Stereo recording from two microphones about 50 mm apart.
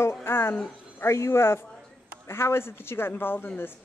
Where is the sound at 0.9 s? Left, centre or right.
Left.